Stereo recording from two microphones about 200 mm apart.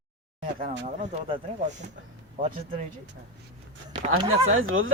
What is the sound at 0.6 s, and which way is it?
Speech, 35° right (ahead or behind).